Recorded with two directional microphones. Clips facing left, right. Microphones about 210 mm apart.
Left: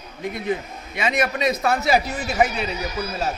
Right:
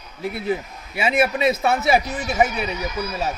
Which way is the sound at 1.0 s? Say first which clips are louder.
Right 3 dB; 10° right (ahead or behind).